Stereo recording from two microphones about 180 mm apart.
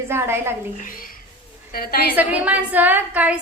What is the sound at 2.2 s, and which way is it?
A child's voice, 10° right (ahead or behind).